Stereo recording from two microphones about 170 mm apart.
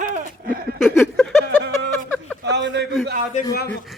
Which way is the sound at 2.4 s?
90° right.